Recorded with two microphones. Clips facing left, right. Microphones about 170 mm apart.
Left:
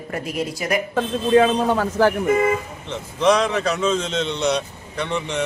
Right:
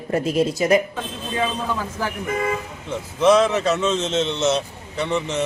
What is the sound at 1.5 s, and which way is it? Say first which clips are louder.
Speech: left 7 dB; 70° left (ahead or behind).